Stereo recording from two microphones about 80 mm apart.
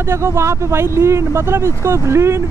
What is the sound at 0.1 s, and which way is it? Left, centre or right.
Speech, right.